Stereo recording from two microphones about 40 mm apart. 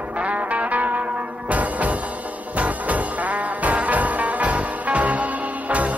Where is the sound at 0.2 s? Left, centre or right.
Right.